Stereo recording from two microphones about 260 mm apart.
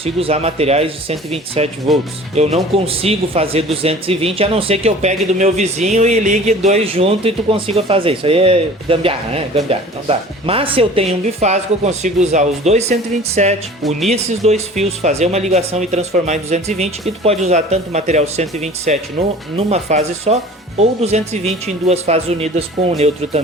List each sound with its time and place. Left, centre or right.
0.0 s speech: right